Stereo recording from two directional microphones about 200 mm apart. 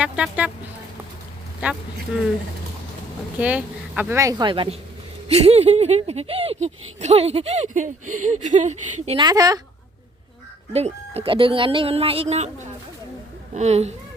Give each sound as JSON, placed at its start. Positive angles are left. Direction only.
{"t": 0.0, "sound": "speech", "side_deg": -5}
{"t": 1.6, "sound": "speech", "side_deg": -10}
{"t": 3.3, "sound": "speech", "side_deg": -10}
{"t": 9.0, "sound": "speech", "side_deg": -25}
{"t": 10.7, "sound": "speech", "side_deg": -30}
{"t": 13.5, "sound": "speech", "side_deg": -35}